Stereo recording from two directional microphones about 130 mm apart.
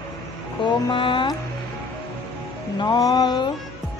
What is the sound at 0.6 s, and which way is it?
Music, 40° left (ahead or behind).